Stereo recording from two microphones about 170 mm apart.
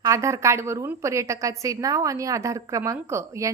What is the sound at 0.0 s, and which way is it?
A woman's voice, 20° right (ahead or behind).